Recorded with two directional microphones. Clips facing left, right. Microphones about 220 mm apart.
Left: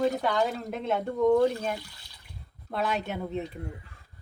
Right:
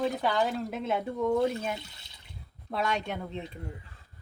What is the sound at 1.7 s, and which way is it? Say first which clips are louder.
Water: left 2 dB; 25° right (ahead or behind).